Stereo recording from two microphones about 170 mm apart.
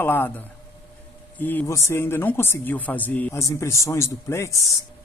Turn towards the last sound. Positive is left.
turn(degrees=15)  # may be behind; listen again after turning